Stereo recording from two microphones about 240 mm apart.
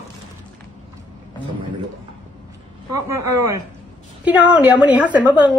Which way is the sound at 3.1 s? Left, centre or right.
Centre.